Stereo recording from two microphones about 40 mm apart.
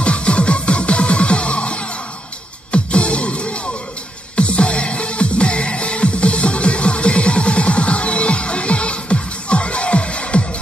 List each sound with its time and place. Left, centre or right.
0.0 s music: left